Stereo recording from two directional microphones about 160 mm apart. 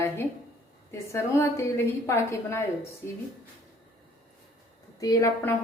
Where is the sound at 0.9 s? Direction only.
15° left (ahead or behind).